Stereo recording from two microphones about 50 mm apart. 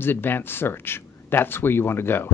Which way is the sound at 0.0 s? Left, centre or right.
Left.